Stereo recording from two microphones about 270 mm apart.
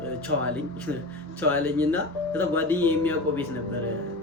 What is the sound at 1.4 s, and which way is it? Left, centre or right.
Speech, centre.